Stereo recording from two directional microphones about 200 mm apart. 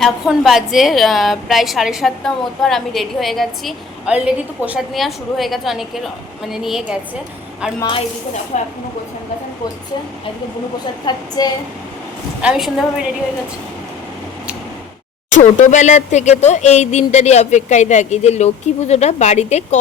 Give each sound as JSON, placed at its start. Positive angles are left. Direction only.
{"t": 0.0, "sound": "a woman's voice", "side_deg": 0}
{"t": 7.8, "sound": "a woman's voice", "side_deg": 25}
{"t": 8.5, "sound": "speech", "side_deg": 35}
{"t": 11.0, "sound": "a woman's voice", "side_deg": 20}
{"t": 12.4, "sound": "a woman's voice", "side_deg": -5}
{"t": 15.3, "sound": "speech", "side_deg": 35}